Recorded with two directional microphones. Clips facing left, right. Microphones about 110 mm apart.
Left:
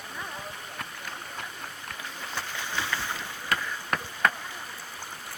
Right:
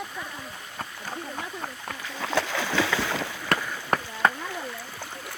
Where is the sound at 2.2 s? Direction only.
90° right.